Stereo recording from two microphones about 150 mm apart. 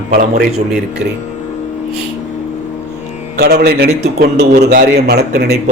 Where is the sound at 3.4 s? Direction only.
90° right.